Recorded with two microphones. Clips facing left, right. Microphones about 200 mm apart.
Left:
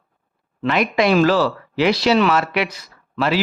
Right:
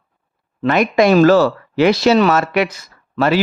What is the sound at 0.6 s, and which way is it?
Speech, 45° right (ahead or behind).